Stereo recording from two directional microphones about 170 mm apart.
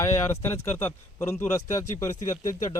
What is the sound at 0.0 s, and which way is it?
A man's voice, 15° left (ahead or behind).